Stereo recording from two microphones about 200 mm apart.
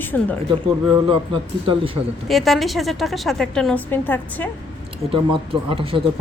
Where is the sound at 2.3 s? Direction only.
Centre (ahead or behind).